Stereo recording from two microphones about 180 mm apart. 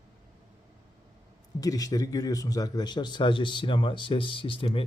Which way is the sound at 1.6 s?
20° left (ahead or behind).